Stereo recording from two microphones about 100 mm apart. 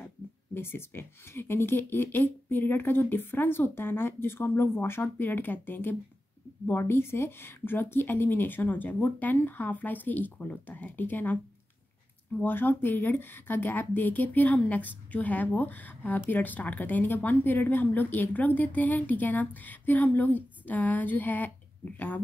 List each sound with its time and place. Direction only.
0.6 s speech: 25° left (ahead or behind)
12.4 s a woman's voice: 20° left (ahead or behind)